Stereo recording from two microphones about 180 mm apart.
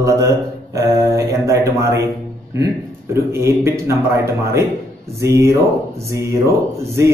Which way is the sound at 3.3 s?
15° right (ahead or behind).